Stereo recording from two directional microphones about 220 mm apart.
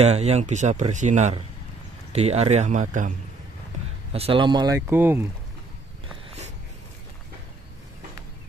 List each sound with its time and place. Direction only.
0.0 s speech: 30° right (ahead or behind)
3.7 s a sound: 35° right (ahead or behind)
4.1 s speech: 25° right (ahead or behind); by 5.2 s 10° right (ahead or behind)